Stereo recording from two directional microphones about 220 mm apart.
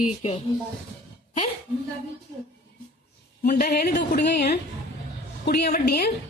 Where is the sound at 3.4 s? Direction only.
40° left (ahead or behind).